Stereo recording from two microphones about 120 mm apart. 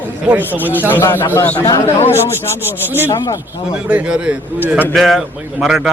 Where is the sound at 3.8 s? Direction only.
10° right (ahead or behind).